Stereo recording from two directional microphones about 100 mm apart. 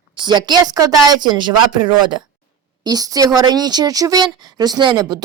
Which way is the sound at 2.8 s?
40° right (ahead or behind).